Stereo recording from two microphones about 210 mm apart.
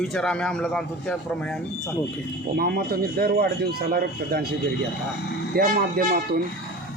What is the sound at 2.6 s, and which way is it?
A man's voice, 45° right (ahead or behind).